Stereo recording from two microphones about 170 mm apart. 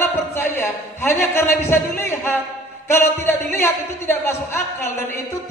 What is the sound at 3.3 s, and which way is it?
Speech, 15° left (ahead or behind).